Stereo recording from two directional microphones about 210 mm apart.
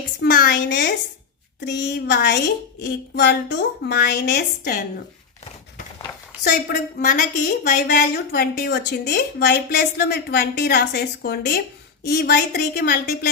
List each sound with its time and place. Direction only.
0.2 s a sound: 50° left (ahead or behind)
1.6 s speech: 55° left (ahead or behind)
6.4 s a woman's voice: 45° left (ahead or behind)